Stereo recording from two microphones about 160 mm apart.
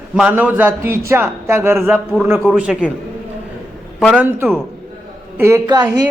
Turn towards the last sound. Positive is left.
turn(degrees=-25)  # may be behind; listen again after turning